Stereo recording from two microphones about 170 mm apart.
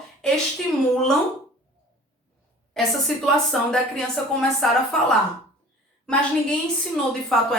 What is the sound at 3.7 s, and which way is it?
A woman's voice, 5° left (ahead or behind).